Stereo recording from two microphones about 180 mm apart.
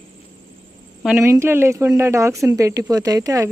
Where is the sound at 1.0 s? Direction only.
15° right (ahead or behind).